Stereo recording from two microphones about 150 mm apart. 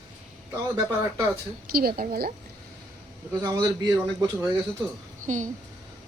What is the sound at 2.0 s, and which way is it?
Speech, 90° right.